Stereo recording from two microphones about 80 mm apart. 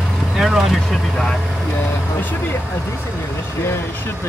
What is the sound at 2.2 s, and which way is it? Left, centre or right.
Speech, left.